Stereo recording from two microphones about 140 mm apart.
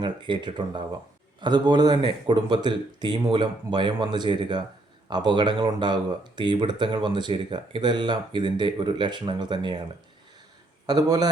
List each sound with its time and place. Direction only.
0.0 s speech: 35° right (ahead or behind)
10.8 s a man's voice: 30° right (ahead or behind)